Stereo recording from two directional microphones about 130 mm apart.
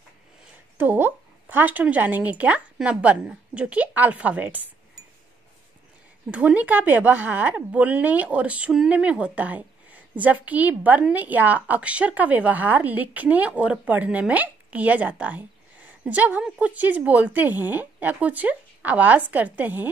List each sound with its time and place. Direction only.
0.7 s a woman's voice: 15° right (ahead or behind)
6.3 s a woman's voice: 10° right (ahead or behind)